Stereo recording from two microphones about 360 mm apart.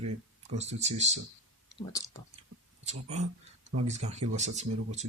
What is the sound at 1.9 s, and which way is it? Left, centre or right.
Speech, centre.